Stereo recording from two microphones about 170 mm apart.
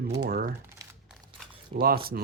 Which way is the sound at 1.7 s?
60° right (ahead or behind).